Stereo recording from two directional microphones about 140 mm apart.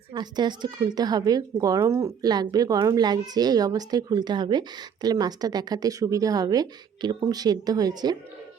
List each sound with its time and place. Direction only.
0.1 s speech: 30° right (ahead or behind)